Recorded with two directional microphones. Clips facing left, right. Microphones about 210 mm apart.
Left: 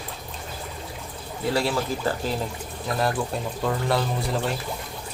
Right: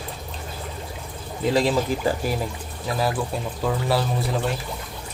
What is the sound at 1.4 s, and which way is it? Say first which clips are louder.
Speech: right 4 dB; 20° right (ahead or behind).